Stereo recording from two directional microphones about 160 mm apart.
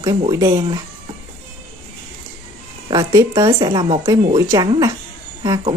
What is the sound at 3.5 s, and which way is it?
Speech, 30° right (ahead or behind).